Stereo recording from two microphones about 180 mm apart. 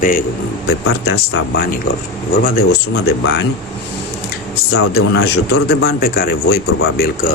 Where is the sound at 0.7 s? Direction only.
65° left (ahead or behind).